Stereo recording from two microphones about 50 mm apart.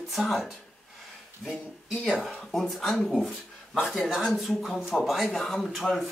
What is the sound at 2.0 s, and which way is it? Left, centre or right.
Speech, centre.